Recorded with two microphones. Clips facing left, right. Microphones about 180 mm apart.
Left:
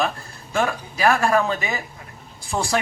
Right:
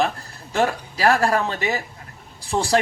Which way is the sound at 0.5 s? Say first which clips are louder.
Right 2 dB; 35° right (ahead or behind).